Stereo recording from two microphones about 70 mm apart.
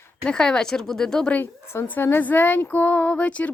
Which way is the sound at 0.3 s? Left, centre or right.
Centre.